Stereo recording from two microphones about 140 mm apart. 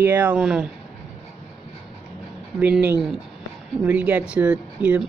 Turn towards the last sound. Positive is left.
turn(degrees=-10)  # may be behind; listen again after turning